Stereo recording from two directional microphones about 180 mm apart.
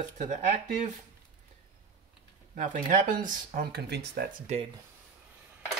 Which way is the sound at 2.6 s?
50° right (ahead or behind).